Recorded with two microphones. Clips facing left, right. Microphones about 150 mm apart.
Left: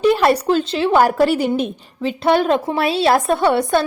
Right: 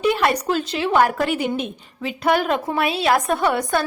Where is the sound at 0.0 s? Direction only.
35° left (ahead or behind).